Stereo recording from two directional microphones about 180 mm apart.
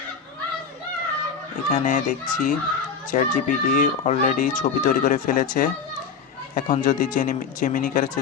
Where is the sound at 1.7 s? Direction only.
45° left (ahead or behind).